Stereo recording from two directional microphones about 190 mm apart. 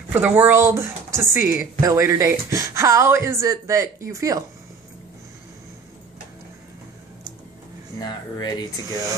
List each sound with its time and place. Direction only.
0.1 s speech: 10° right (ahead or behind)
8.0 s speech: 20° left (ahead or behind)